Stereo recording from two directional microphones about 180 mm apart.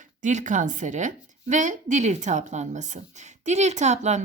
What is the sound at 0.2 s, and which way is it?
A woman's voice, 45° right (ahead or behind).